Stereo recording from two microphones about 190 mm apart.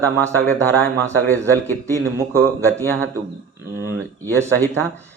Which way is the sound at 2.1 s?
15° right (ahead or behind).